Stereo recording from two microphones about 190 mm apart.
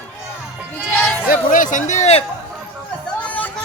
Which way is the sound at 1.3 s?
45° left (ahead or behind).